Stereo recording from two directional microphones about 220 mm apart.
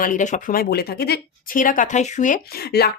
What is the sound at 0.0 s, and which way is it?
Speech, 35° left (ahead or behind).